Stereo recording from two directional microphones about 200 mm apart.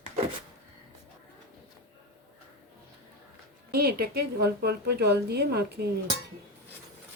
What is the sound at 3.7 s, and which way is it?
A woman's voice, 50° right (ahead or behind).